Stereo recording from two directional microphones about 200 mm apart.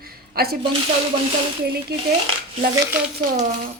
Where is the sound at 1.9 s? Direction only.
50° right (ahead or behind).